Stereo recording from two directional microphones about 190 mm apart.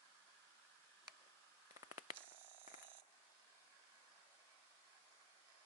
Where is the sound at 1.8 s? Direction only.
20° right (ahead or behind).